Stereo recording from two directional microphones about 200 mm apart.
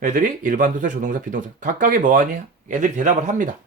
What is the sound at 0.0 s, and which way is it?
Speech, 40° right (ahead or behind).